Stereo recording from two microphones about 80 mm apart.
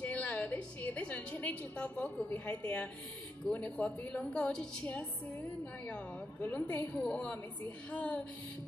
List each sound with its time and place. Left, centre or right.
0.0 s a woman's voice: centre
6.4 s a woman's voice: centre